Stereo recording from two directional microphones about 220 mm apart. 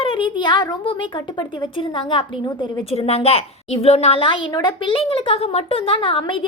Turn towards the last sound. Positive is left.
turn(degrees=25)  # may be behind; listen again after turning